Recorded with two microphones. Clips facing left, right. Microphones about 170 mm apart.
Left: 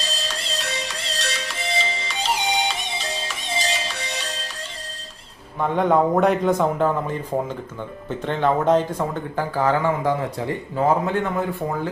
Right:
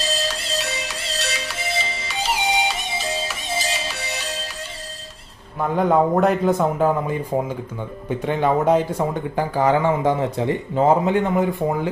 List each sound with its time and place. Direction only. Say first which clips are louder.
0.0 s music: right 5 dB; 5° right (ahead or behind)
5.5 s speech: right 1 dB; 5° right (ahead or behind)